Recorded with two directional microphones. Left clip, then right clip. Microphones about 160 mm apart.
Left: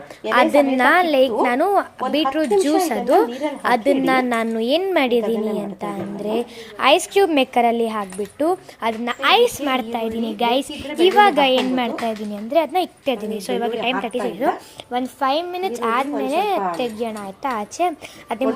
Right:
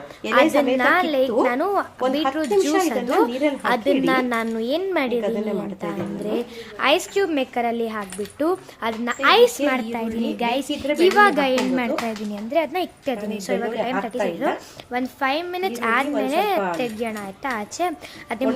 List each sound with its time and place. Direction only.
0.3 s a woman's voice: 30° left (ahead or behind); by 18.4 s 10° left (ahead or behind)